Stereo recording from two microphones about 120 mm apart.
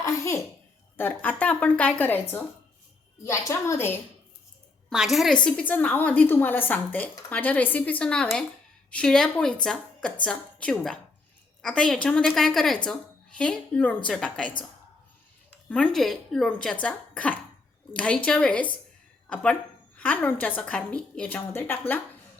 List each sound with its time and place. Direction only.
0.0 s a sound: 25° left (ahead or behind)
0.9 s a woman's voice: 15° left (ahead or behind)
4.9 s speech: centre (ahead or behind)
5.4 s a woman's voice: 10° left (ahead or behind)
15.7 s a woman's voice: 5° left (ahead or behind)